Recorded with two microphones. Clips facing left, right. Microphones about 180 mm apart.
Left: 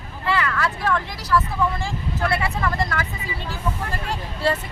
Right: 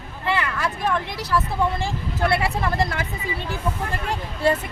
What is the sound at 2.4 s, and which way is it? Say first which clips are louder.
Speech: right 1 dB; 30° right (ahead or behind).